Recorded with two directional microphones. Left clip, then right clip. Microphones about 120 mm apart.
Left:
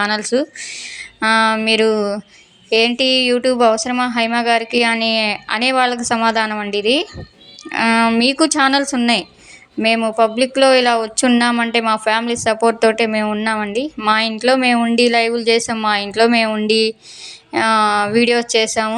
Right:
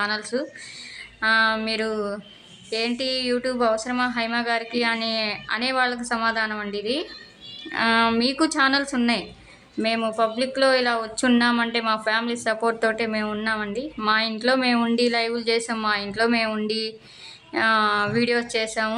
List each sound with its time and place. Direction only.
0.0 s speech: 40° left (ahead or behind)
10.2 s speech: 30° left (ahead or behind)